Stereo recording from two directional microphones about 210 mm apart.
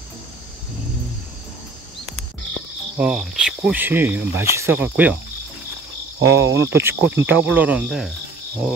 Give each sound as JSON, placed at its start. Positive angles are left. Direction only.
{"t": 3.0, "sound": "cricket", "side_deg": -5}
{"t": 6.1, "sound": "cricket", "side_deg": -65}
{"t": 6.6, "sound": "cricket", "side_deg": -10}